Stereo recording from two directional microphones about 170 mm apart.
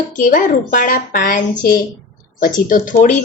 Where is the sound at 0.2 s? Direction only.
50° left (ahead or behind).